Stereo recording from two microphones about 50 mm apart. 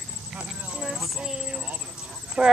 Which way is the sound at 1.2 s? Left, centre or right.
Centre.